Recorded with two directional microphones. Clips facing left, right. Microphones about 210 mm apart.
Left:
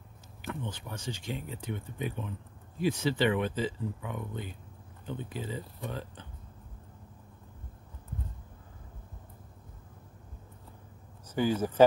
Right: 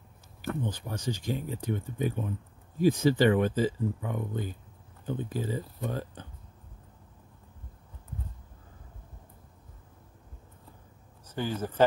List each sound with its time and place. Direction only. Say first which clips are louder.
0.4 s speech: right 5 dB; 35° right (ahead or behind)
11.3 s speech: left 4 dB; 10° left (ahead or behind)